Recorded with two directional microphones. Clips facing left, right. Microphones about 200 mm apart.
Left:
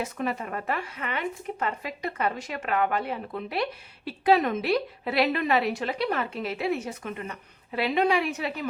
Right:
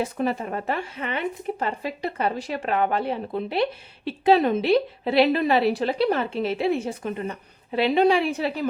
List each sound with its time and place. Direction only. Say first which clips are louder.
0.0 s speech: right 5 dB; 30° right (ahead or behind)